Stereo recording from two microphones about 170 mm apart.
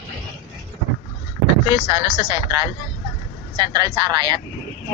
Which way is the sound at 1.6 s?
20° right (ahead or behind).